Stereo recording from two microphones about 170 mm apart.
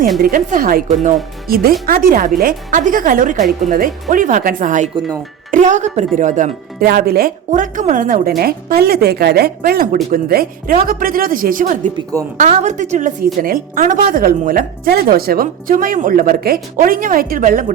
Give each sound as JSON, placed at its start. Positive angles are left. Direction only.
{"t": 0.2, "sound": "a woman's voice", "side_deg": -55}
{"t": 8.4, "sound": "a woman's voice", "side_deg": -65}